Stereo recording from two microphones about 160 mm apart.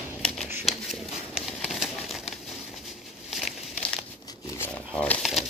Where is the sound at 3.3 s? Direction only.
Centre (ahead or behind).